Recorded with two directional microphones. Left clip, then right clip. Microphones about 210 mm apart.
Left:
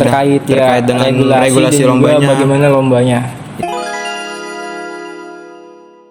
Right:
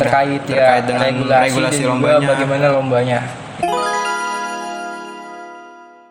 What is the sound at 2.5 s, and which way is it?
Speech, 30° left (ahead or behind).